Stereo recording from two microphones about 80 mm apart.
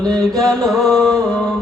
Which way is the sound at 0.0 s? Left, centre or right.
Right.